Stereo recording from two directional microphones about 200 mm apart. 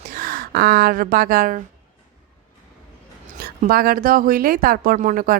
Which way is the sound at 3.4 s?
45° right (ahead or behind).